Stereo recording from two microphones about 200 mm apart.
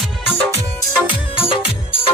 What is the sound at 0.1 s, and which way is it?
Music, centre (ahead or behind).